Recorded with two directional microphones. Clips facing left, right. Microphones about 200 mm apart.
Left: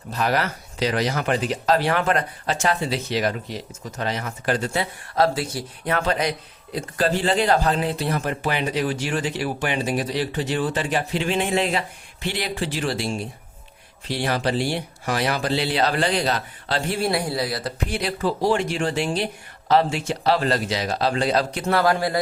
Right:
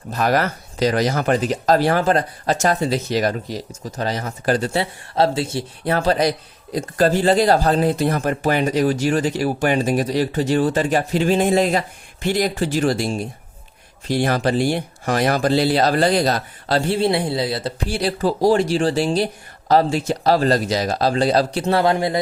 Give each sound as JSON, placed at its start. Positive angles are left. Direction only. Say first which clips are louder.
{"t": 0.1, "sound": "speech", "louder": "right 4 dB", "side_deg": -45}
{"t": 17.0, "sound": "speech", "louder": "right 4 dB", "side_deg": -25}
{"t": 21.6, "sound": "speech", "louder": "right 3 dB", "side_deg": -25}